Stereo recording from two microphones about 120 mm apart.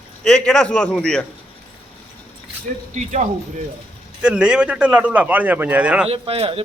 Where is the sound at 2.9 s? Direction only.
90° right.